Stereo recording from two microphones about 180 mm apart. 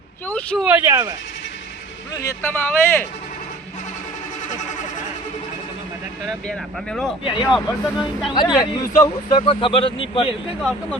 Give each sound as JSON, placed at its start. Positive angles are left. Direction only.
{"t": 0.3, "sound": "speech", "side_deg": 10}
{"t": 0.6, "sound": "speech", "side_deg": -10}
{"t": 2.1, "sound": "speech", "side_deg": 15}
{"t": 6.2, "sound": "speech", "side_deg": 0}
{"t": 8.3, "sound": "a man's voice", "side_deg": 25}